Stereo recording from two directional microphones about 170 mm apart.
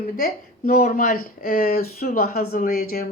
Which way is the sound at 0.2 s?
60° left (ahead or behind).